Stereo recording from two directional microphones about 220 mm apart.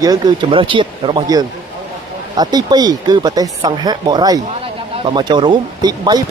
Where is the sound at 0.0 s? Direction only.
15° right (ahead or behind).